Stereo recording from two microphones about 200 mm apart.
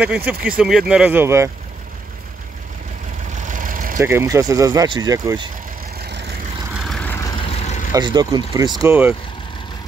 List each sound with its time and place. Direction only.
0.0 s speech: 5° right (ahead or behind)
3.4 s vehicle: 40° right (ahead or behind)
4.0 s speech: 15° right (ahead or behind)
5.9 s vehicle: 55° right (ahead or behind)
6.7 s vehicle: centre (ahead or behind); by 7.9 s 35° left (ahead or behind)
7.9 s speech: 20° right (ahead or behind)
8.8 s speech: 10° right (ahead or behind)